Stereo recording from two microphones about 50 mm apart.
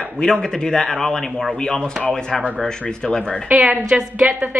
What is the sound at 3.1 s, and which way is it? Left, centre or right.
Speech, centre.